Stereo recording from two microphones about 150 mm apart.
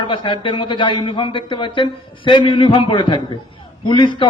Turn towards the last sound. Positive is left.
turn(degrees=30)  # may be behind; listen again after turning